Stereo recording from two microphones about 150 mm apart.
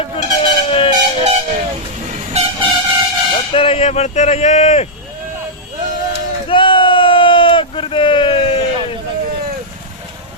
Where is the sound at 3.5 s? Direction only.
40° left (ahead or behind).